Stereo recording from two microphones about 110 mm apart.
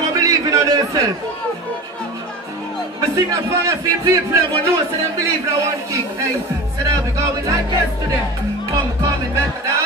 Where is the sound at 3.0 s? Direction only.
30° right (ahead or behind).